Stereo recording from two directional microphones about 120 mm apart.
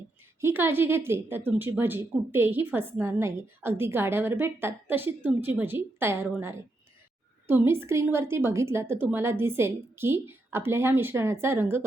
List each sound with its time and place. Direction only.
0.4 s a woman's voice: 20° right (ahead or behind)